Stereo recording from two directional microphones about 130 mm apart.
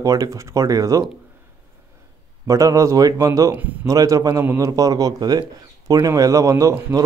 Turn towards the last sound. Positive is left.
turn(degrees=-25)  # may be behind; listen again after turning